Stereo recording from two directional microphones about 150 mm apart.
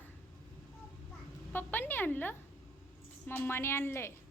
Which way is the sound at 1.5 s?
15° left (ahead or behind).